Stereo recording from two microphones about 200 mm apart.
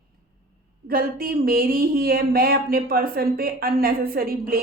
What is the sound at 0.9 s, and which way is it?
Speech, 50° right (ahead or behind).